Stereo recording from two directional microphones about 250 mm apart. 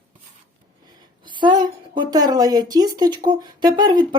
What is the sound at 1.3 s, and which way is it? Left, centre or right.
A woman's voice, centre.